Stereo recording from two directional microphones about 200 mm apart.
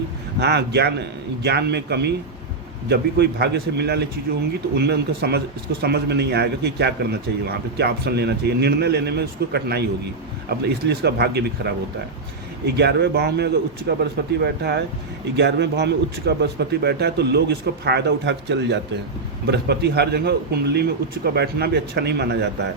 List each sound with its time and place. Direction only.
0.3 s a man's voice: 55° right (ahead or behind)
12.6 s a man's voice: 55° right (ahead or behind)